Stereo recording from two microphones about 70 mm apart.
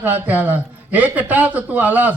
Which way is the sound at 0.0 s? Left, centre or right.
Right.